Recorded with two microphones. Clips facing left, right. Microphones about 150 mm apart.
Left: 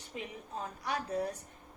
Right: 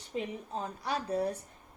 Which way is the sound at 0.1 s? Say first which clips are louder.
Right 6 dB; 30° right (ahead or behind).